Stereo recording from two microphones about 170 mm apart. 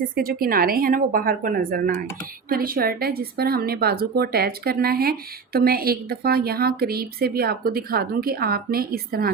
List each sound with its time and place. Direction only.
0.0 s a woman's voice: 60° right (ahead or behind)